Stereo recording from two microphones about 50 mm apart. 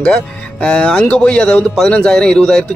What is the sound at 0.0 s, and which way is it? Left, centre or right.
Speech, centre.